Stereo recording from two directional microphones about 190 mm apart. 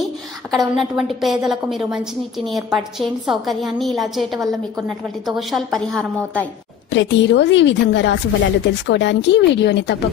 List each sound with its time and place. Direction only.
0.5 s a woman's voice: centre (ahead or behind)
6.9 s speech: 70° left (ahead or behind)